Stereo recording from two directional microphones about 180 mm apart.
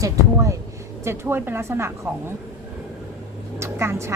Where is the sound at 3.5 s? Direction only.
15° right (ahead or behind).